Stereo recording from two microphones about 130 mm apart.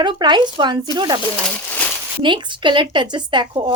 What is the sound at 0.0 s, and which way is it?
Speech, 35° right (ahead or behind).